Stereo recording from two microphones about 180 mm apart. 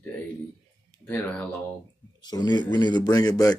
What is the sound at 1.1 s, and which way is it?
Speech, 10° left (ahead or behind).